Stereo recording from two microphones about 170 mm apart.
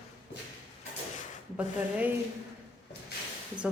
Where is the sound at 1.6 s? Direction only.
10° right (ahead or behind).